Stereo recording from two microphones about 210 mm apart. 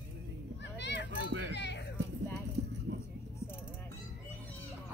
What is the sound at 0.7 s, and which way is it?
Children playing, 55° left (ahead or behind).